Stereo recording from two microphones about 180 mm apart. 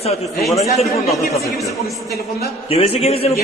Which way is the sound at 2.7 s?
35° left (ahead or behind).